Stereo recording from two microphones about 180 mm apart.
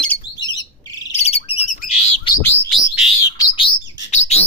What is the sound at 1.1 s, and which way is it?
Bird, 35° left (ahead or behind).